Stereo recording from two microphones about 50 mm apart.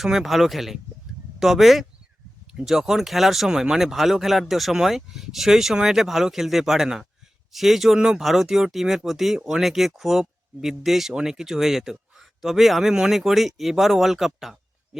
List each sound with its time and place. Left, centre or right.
0.0 s speech: centre
7.9 s a man's voice: centre